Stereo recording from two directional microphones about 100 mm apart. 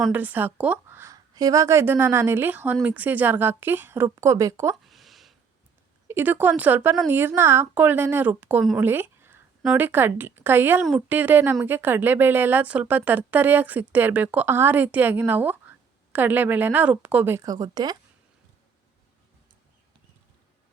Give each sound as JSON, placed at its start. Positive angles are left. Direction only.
{"t": 0.1, "sound": "a woman's voice", "side_deg": -15}
{"t": 1.1, "sound": "a woman's voice", "side_deg": -40}
{"t": 4.7, "sound": "a sound", "side_deg": 0}
{"t": 6.1, "sound": "a woman's voice", "side_deg": -20}
{"t": 8.8, "sound": "a sound", "side_deg": -20}
{"t": 9.7, "sound": "a woman's voice", "side_deg": -20}
{"t": 17.3, "sound": "speech", "side_deg": -35}